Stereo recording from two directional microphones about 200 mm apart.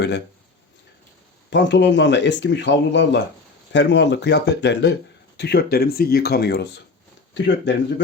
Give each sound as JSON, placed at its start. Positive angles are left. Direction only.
{"t": 1.5, "sound": "speech", "side_deg": 60}